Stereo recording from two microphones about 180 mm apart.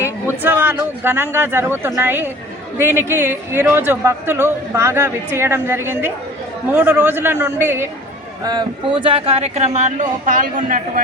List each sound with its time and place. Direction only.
0.0 s a man's voice: 10° right (ahead or behind)
8.4 s speech: 25° right (ahead or behind); by 11.0 s 50° right (ahead or behind)